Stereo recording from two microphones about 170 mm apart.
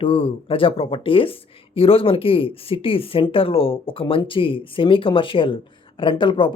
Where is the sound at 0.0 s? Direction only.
30° left (ahead or behind).